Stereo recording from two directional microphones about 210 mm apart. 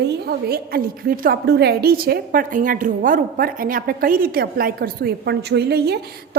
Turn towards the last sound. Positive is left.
turn(degrees=-50)  # may be behind; listen again after turning